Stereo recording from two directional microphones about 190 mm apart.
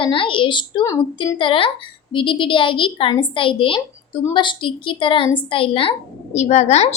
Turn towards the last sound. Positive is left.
turn(degrees=35)  # may be behind; listen again after turning